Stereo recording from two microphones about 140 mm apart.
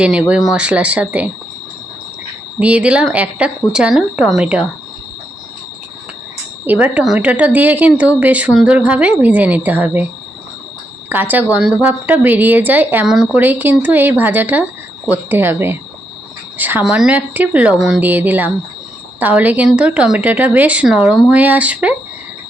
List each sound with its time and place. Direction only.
0.0 s speech: 10° right (ahead or behind)
2.6 s speech: 10° right (ahead or behind)
6.7 s speech: 10° right (ahead or behind)
11.1 s speech: 15° right (ahead or behind)
13.1 s speech: 5° right (ahead or behind)